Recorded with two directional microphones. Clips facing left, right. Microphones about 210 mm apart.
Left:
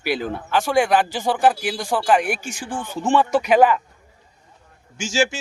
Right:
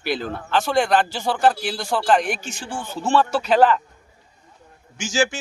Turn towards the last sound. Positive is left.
turn(degrees=25)  # may be behind; listen again after turning